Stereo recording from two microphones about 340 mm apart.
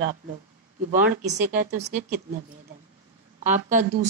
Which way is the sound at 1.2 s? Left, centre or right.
Right.